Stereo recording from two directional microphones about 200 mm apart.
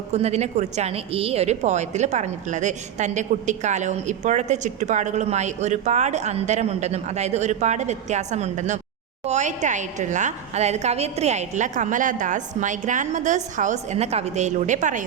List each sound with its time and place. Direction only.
0.1 s a woman's voice: 35° right (ahead or behind)